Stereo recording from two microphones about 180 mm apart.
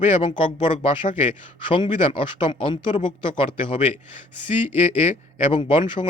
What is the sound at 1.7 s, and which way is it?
Speech, 30° left (ahead or behind).